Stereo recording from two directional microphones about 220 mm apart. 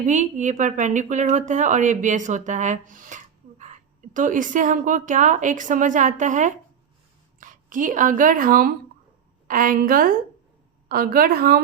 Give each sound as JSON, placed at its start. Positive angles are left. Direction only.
{"t": 0.0, "sound": "a woman's voice", "side_deg": -35}